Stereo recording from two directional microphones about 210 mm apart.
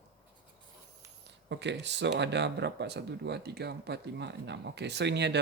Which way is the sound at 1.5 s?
55° right (ahead or behind).